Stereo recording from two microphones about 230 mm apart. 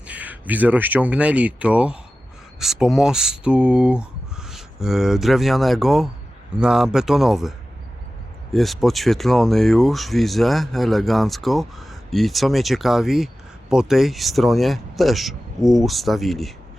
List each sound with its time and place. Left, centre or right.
0.1 s speech: centre
8.5 s speech: centre